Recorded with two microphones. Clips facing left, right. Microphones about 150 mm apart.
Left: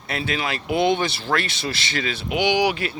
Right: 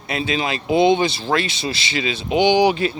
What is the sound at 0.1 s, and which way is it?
Speech, 20° right (ahead or behind).